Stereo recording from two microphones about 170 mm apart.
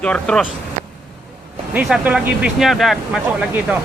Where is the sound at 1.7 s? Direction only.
5° right (ahead or behind).